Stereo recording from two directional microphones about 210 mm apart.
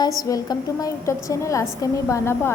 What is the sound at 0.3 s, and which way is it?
A woman's voice, 15° left (ahead or behind).